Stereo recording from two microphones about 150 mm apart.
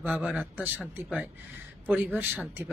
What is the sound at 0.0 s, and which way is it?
Speech, 10° right (ahead or behind).